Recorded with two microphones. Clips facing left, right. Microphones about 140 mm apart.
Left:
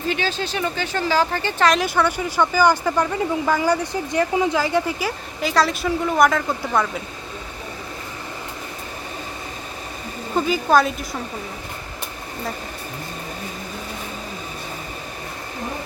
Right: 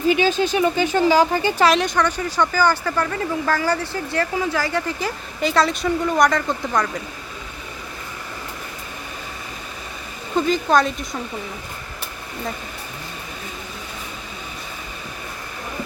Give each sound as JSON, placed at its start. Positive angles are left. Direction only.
{"t": 0.1, "sound": "speech", "side_deg": -15}
{"t": 1.8, "sound": "speech", "side_deg": 10}
{"t": 10.3, "sound": "a woman's voice", "side_deg": 5}